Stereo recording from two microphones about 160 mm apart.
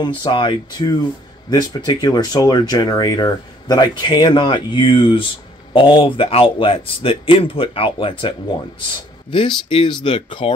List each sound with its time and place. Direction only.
0.0 s speech: 30° left (ahead or behind)
9.7 s speech: 35° left (ahead or behind)